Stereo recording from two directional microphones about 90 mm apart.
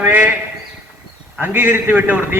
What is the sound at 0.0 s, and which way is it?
Speech, 20° right (ahead or behind).